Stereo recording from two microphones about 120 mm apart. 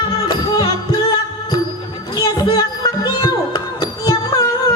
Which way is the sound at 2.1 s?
35° left (ahead or behind).